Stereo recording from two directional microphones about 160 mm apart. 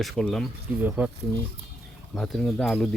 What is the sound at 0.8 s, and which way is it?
Speech, 10° right (ahead or behind).